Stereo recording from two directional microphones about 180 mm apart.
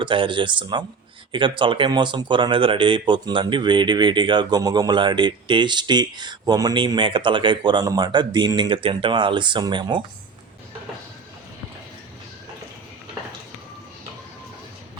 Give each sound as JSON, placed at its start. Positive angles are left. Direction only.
{"t": 0.0, "sound": "speech", "side_deg": -30}